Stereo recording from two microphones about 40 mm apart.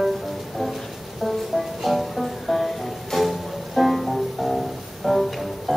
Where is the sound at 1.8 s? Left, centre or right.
Centre.